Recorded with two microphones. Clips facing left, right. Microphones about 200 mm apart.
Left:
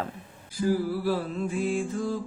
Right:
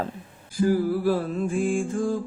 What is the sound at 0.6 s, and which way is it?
A woman's voice, 50° right (ahead or behind).